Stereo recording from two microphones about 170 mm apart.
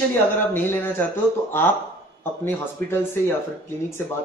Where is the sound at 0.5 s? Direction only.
10° left (ahead or behind).